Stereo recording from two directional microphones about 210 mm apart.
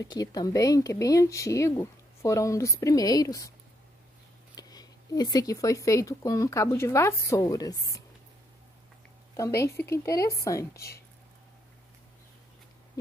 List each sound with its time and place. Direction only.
0.0 s speech: 20° left (ahead or behind)
4.6 s speech: 20° left (ahead or behind)
9.6 s speech: 15° left (ahead or behind)